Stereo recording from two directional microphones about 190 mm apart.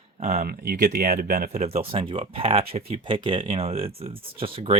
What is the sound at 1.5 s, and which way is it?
Speech, 35° right (ahead or behind).